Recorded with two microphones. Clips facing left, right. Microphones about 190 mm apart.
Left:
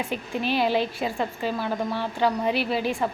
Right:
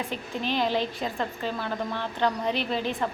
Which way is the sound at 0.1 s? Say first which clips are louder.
Left 3 dB; 10° left (ahead or behind).